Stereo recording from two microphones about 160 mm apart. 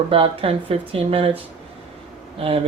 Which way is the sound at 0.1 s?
35° right (ahead or behind).